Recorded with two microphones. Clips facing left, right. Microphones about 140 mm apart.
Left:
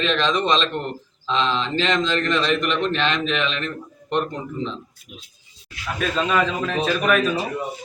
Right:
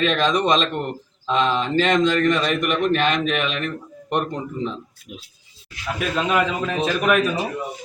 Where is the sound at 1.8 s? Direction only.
10° right (ahead or behind).